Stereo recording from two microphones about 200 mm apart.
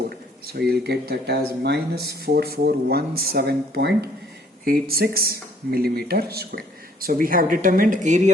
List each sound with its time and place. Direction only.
0.7 s speech: 55° right (ahead or behind); by 8.3 s 40° right (ahead or behind)